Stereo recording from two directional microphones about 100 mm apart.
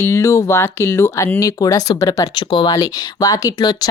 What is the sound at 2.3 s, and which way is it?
Speech, 50° left (ahead or behind).